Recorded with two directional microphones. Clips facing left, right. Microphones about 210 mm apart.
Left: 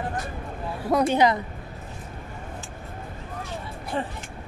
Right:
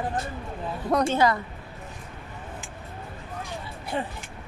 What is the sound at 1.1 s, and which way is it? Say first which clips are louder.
Speech: left 2 dB; 20° left (ahead or behind).